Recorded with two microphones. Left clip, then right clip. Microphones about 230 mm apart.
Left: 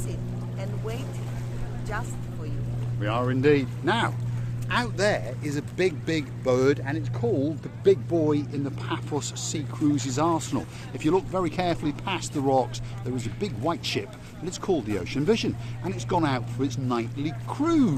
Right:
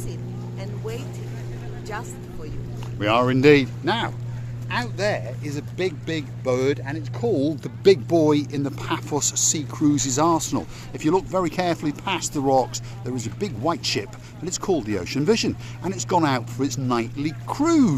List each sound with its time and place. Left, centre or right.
3.0 s speech: right
4.7 s speech: centre
7.3 s speech: right